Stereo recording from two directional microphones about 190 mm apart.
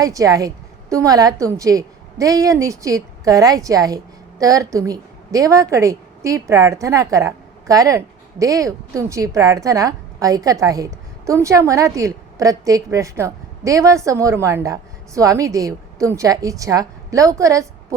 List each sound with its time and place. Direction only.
0.0 s a woman's voice: 15° right (ahead or behind)